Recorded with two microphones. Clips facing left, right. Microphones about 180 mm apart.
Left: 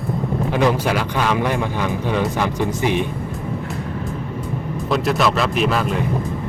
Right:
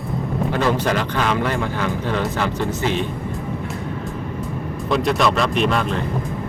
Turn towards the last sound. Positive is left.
turn(degrees=5)  # may be behind; listen again after turning